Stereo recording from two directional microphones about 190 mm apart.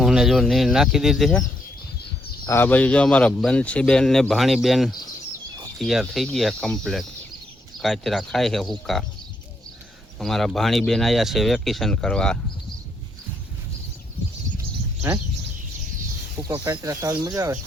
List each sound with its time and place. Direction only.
0.0 s speech: centre (ahead or behind)
2.5 s speech: 10° left (ahead or behind)
10.2 s speech: centre (ahead or behind)
16.4 s speech: 15° right (ahead or behind)